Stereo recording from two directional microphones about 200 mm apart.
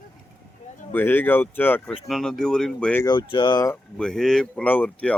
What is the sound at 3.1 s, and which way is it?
Speech, 25° left (ahead or behind).